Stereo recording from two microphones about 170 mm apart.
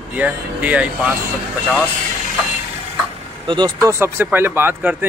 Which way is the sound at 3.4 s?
25° right (ahead or behind).